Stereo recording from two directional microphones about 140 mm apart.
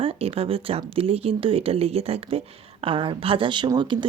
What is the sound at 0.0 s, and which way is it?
Speech, 45° right (ahead or behind).